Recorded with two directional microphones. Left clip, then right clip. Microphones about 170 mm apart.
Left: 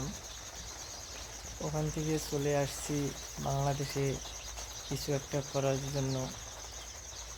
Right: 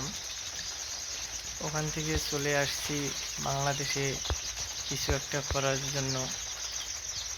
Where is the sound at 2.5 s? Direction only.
Centre (ahead or behind).